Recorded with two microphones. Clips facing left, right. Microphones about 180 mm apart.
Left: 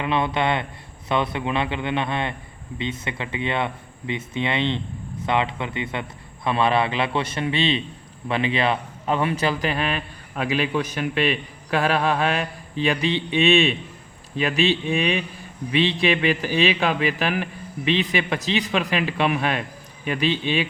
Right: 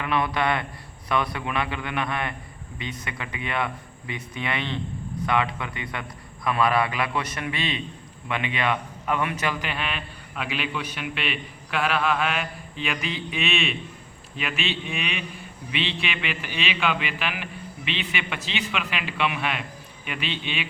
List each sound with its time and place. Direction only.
0.0 s a man's voice: 25° left (ahead or behind)